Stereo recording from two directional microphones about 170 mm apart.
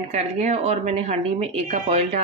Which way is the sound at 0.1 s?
45° right (ahead or behind).